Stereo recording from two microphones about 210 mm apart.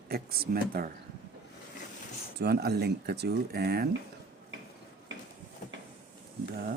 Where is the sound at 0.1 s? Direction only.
45° right (ahead or behind).